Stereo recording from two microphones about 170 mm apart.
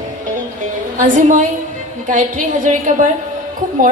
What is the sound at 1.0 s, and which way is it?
A woman's voice, 50° right (ahead or behind).